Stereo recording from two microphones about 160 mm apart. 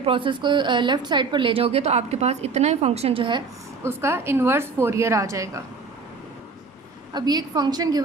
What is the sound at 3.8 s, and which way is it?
A woman's voice, 15° right (ahead or behind).